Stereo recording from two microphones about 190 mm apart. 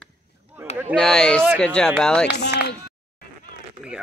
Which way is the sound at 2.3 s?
60° left (ahead or behind).